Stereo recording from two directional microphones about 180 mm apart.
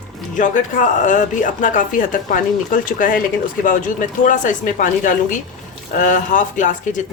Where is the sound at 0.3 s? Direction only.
45° left (ahead or behind).